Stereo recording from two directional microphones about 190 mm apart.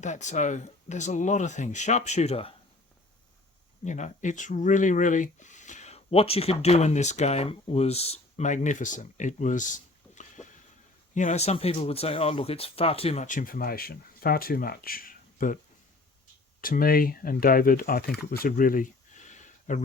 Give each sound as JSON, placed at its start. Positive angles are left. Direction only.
{"t": 0.0, "sound": "speech", "side_deg": 40}
{"t": 3.8, "sound": "speech", "side_deg": 40}
{"t": 16.6, "sound": "speech", "side_deg": 50}
{"t": 18.4, "sound": "a sound", "side_deg": 45}